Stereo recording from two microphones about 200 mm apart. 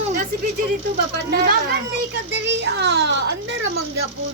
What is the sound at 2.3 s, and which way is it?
A woman's voice, 60° right (ahead or behind).